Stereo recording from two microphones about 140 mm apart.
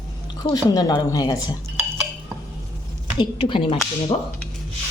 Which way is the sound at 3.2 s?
35° left (ahead or behind).